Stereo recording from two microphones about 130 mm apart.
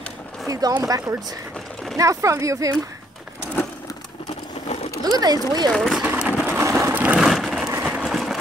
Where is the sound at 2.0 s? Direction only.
25° right (ahead or behind).